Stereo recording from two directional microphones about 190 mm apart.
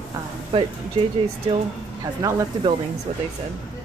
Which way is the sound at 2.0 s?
20° right (ahead or behind).